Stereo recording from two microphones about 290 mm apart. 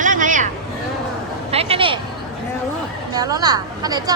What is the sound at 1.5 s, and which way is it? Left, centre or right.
Speech, centre.